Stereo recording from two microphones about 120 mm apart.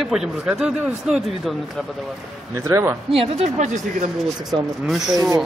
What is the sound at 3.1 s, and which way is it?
Speech, 50° right (ahead or behind).